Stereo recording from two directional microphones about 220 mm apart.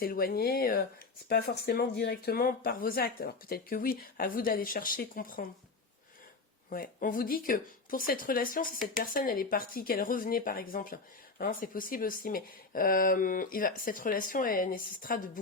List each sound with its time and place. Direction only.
0.0 s speech: 45° left (ahead or behind)
6.7 s speech: 40° left (ahead or behind)